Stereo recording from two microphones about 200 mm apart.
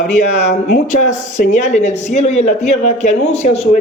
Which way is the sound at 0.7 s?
40° left (ahead or behind).